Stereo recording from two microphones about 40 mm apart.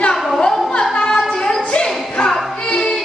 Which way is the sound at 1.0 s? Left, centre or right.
Centre.